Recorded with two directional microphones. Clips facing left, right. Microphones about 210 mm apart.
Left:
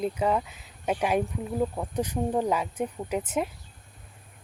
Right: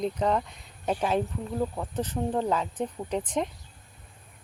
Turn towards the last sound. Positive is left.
turn(degrees=5)  # may be behind; listen again after turning